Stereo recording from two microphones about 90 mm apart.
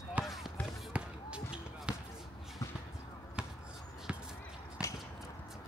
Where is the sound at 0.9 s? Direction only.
15° right (ahead or behind).